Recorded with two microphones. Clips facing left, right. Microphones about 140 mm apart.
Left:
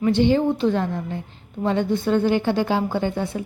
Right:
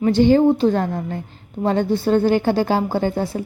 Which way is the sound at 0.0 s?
40° right (ahead or behind).